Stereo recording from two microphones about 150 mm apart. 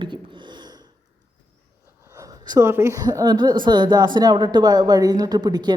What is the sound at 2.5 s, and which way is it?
A woman's voice, 20° right (ahead or behind).